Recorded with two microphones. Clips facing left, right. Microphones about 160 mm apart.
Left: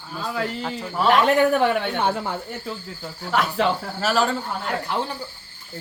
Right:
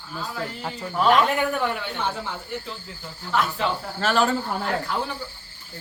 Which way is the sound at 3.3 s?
75° left (ahead or behind).